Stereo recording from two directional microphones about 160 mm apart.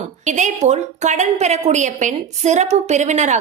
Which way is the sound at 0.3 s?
50° right (ahead or behind).